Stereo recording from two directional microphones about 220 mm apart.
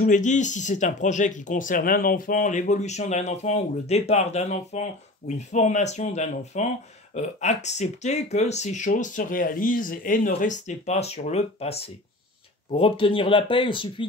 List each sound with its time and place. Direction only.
0.0 s speech: 35° left (ahead or behind)
12.7 s speech: 25° left (ahead or behind)